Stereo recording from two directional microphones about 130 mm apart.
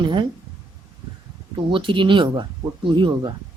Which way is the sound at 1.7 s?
40° right (ahead or behind).